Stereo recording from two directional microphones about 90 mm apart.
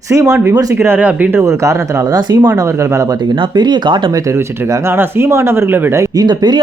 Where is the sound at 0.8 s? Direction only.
20° right (ahead or behind).